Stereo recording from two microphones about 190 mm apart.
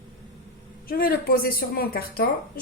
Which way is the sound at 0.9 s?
50° left (ahead or behind).